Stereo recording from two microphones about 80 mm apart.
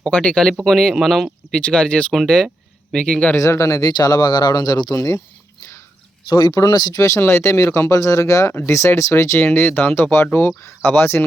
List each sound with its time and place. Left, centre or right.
0.0 s speech: centre
3.3 s speech: left
4.9 s speech: left
6.2 s speech: left
7.0 s speech: left